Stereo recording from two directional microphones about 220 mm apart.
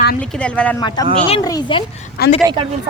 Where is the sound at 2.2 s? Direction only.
45° left (ahead or behind).